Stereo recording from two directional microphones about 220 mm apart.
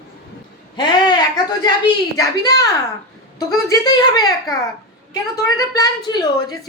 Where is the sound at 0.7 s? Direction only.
20° left (ahead or behind).